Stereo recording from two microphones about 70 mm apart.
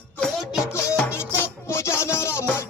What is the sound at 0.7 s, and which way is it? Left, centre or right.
Music, left.